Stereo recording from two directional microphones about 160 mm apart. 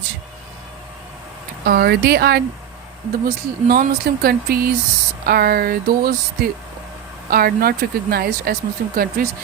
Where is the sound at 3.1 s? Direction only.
70° right (ahead or behind).